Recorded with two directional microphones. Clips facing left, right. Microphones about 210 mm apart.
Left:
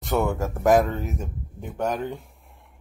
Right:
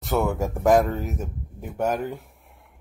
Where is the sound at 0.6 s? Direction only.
Centre (ahead or behind).